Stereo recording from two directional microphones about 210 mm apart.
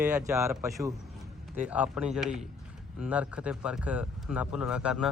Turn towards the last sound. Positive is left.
turn(degrees=-5)  # may be behind; listen again after turning